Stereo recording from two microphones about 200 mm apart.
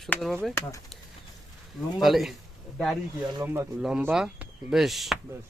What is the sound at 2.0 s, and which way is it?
Speech, centre (ahead or behind).